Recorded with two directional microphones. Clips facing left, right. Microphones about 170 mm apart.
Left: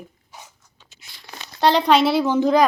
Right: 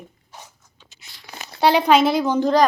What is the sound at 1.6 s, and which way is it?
Speech, 5° right (ahead or behind).